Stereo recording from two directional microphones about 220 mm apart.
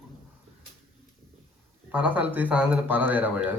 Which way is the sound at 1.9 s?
10° right (ahead or behind).